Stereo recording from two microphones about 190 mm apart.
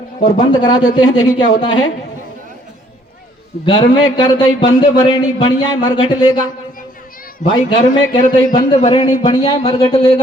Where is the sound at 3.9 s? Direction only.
25° left (ahead or behind).